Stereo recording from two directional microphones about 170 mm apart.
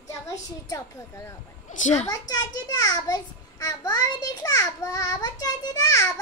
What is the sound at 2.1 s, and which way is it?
A child's voice, 20° left (ahead or behind).